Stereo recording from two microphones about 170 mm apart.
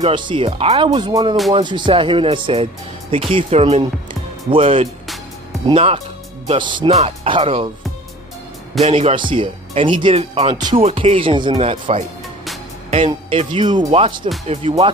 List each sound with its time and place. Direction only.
0.0 s speech: 30° right (ahead or behind)
8.8 s speech: 35° right (ahead or behind)